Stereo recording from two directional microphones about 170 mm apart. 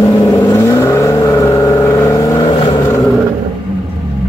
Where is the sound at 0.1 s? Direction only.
20° left (ahead or behind).